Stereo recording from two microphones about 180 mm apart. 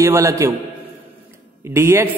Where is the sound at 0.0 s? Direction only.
15° right (ahead or behind).